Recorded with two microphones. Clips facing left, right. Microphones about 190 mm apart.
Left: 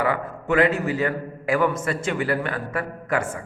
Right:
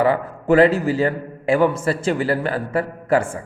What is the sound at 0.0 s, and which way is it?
A man's voice, 30° right (ahead or behind).